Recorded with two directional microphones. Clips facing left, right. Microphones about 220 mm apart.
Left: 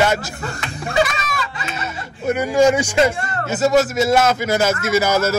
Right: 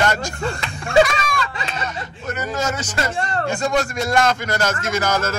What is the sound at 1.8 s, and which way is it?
Speech, 10° left (ahead or behind).